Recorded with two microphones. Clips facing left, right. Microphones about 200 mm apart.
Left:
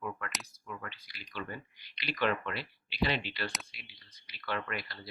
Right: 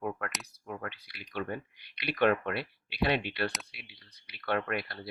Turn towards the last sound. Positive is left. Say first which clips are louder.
# right 5 dB
turn(degrees=-60)  # may be behind; listen again after turning